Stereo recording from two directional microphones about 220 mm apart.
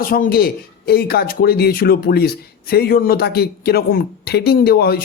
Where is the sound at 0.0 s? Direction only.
40° left (ahead or behind).